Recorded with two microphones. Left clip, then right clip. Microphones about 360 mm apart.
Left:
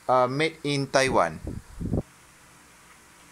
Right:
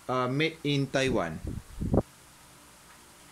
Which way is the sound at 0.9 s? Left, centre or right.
Centre.